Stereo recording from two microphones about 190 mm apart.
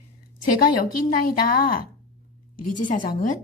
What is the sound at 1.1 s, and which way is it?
Speech, 50° left (ahead or behind).